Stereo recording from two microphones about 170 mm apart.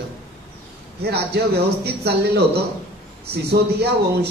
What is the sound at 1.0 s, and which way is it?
Speech, 75° right (ahead or behind).